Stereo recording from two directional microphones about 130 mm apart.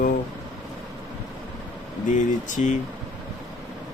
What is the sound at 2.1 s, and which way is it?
Speech, 75° left (ahead or behind).